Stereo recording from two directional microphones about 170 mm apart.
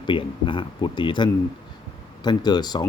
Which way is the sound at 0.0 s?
30° left (ahead or behind).